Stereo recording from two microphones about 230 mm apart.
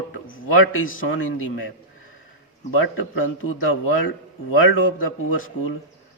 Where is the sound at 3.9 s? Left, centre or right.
Left.